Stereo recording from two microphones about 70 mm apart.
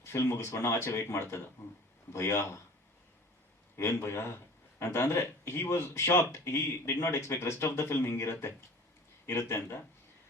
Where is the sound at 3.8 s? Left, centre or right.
Left.